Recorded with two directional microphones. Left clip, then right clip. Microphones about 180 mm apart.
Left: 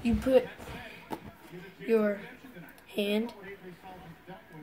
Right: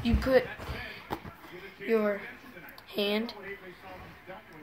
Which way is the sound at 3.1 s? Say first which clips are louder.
Even; 15° left (ahead or behind).